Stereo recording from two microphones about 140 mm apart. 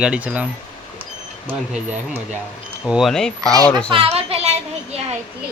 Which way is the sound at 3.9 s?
40° right (ahead or behind).